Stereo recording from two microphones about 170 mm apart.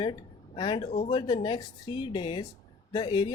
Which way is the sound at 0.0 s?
30° left (ahead or behind).